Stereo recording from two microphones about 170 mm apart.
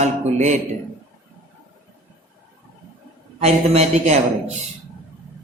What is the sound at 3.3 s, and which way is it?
A man's voice, 40° right (ahead or behind).